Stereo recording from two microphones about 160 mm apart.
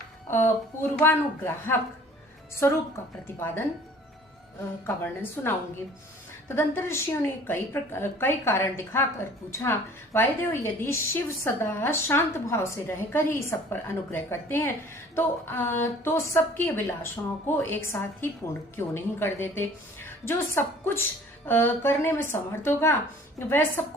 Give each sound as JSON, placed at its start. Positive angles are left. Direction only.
{"t": 0.3, "sound": "a woman's voice", "side_deg": 15}
{"t": 4.9, "sound": "a woman's voice", "side_deg": 10}
{"t": 6.6, "sound": "a woman's voice", "side_deg": 15}